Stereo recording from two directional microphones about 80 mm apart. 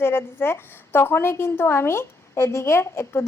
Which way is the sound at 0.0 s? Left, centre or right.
Left.